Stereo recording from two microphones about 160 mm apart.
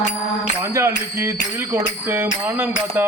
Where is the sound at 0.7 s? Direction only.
15° right (ahead or behind).